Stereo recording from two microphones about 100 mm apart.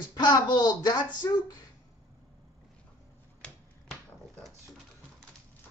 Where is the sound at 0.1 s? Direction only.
45° left (ahead or behind).